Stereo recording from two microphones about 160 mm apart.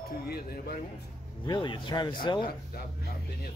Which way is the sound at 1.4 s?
30° left (ahead or behind).